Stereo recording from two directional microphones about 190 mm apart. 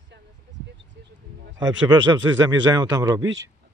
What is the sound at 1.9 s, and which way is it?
A man's voice, 20° right (ahead or behind).